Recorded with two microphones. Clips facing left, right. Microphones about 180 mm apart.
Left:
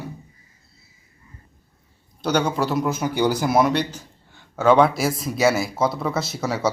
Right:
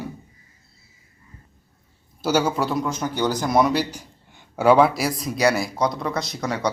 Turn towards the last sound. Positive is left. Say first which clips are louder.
# left 2 dB
turn(degrees=5)  # may be behind; listen again after turning